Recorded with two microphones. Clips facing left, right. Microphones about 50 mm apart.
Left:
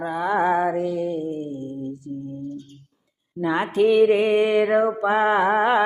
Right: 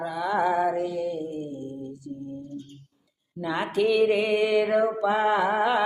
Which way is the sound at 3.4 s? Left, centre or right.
Left.